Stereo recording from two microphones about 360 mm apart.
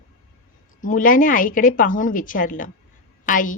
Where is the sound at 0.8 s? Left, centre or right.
Left.